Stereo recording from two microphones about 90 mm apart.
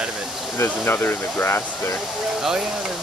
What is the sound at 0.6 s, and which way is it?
Speech, 25° left (ahead or behind).